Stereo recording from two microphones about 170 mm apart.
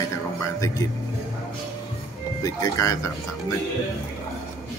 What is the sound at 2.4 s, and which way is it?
Speech, 20° left (ahead or behind).